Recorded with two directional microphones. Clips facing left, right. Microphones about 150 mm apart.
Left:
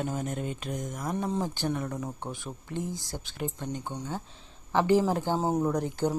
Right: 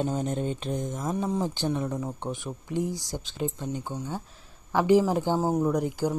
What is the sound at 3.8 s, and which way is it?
Speech, 5° right (ahead or behind).